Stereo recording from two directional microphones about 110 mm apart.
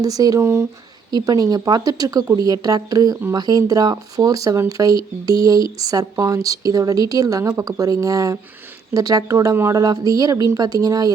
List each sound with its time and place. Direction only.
0.0 s speech: 35° right (ahead or behind)